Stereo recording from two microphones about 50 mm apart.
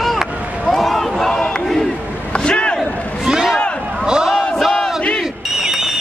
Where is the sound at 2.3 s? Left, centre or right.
Centre.